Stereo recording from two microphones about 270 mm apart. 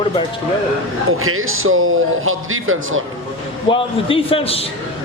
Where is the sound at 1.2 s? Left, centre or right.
Right.